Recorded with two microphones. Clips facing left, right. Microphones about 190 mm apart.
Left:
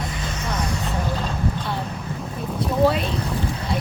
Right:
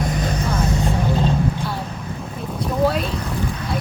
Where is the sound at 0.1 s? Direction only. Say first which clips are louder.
Right 7 dB; 40° right (ahead or behind).